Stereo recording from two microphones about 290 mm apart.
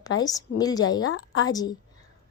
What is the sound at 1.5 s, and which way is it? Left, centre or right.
Speech, centre.